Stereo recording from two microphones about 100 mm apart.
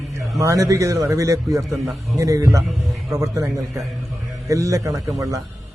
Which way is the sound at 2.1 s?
30° right (ahead or behind).